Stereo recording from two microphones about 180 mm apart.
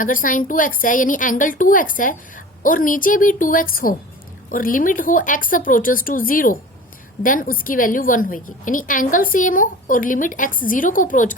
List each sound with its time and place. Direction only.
0.0 s a woman's voice: 50° left (ahead or behind)